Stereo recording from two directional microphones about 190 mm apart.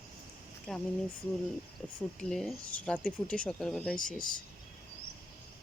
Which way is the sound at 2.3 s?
Centre (ahead or behind).